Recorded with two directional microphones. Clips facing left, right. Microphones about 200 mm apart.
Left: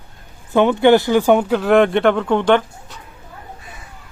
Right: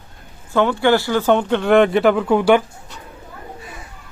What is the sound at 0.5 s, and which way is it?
Speech, 20° left (ahead or behind).